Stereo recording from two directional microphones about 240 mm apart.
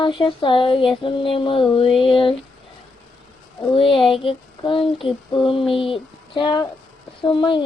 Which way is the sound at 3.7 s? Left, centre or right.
Left.